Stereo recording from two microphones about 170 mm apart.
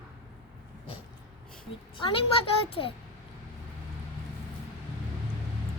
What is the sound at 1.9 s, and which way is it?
A woman's voice, 30° left (ahead or behind).